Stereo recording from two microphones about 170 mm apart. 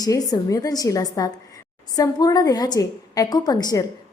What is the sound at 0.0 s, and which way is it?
A woman's voice, 20° left (ahead or behind).